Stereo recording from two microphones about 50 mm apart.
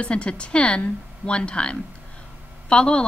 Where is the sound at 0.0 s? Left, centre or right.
Left.